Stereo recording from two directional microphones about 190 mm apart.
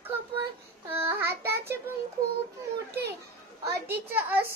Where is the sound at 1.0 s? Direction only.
10° right (ahead or behind).